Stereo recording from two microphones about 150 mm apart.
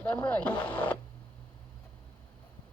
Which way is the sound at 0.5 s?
30° left (ahead or behind).